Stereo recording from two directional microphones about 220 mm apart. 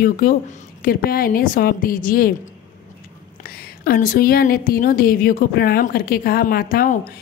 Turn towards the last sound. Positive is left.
turn(degrees=40)  # may be behind; listen again after turning